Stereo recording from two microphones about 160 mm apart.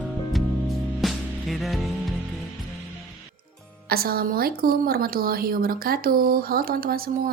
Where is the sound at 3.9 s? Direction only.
70° right (ahead or behind).